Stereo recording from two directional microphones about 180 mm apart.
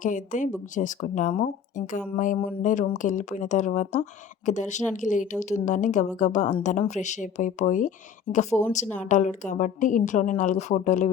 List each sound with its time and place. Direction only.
0.0 s a woman's voice: 45° left (ahead or behind)